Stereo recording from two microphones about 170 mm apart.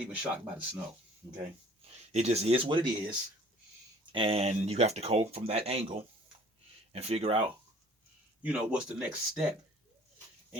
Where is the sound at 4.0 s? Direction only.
30° right (ahead or behind).